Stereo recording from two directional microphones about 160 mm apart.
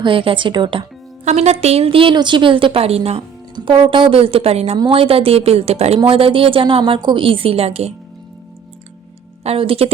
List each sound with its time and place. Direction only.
0.0 s a woman's voice: 35° right (ahead or behind)
1.2 s a woman's voice: 45° right (ahead or behind)
9.4 s a woman's voice: 40° right (ahead or behind)